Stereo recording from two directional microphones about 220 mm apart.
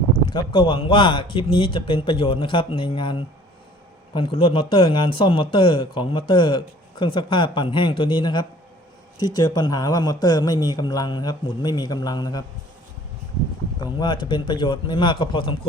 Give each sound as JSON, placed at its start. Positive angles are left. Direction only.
{"t": 0.3, "sound": "a man's voice", "side_deg": 20}
{"t": 14.0, "sound": "a man's voice", "side_deg": 20}